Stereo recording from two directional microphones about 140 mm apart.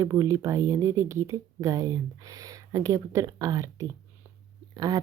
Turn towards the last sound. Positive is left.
turn(degrees=-30)  # may be behind; listen again after turning